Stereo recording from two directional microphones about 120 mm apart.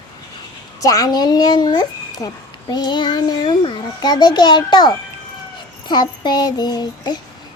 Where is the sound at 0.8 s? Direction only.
30° left (ahead or behind).